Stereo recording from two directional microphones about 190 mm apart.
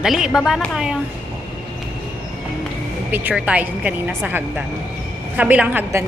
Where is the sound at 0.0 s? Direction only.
Centre (ahead or behind).